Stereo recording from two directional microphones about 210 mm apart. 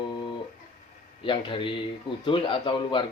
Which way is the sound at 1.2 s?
25° left (ahead or behind).